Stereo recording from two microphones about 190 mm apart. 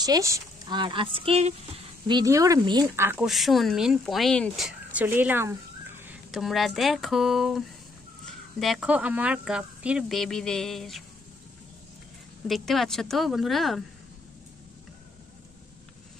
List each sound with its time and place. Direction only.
0.0 s speech: 20° right (ahead or behind)
2.0 s speech: 20° right (ahead or behind)
3.3 s speech: centre (ahead or behind)
12.4 s speech: centre (ahead or behind)